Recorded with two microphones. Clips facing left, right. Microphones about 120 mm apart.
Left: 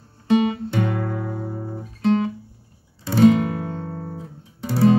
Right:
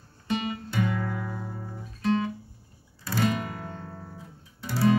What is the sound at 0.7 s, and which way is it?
Music, 50° left (ahead or behind).